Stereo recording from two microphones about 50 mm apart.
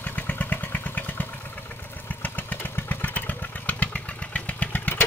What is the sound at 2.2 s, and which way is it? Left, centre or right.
Motorcycle, left.